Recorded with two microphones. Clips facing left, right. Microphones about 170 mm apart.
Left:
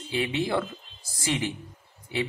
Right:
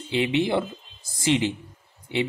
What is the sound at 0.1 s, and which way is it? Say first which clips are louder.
A man's voice: right 4 dB; 20° right (ahead or behind).